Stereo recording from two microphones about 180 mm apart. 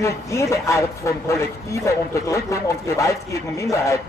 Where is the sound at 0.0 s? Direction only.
15° left (ahead or behind).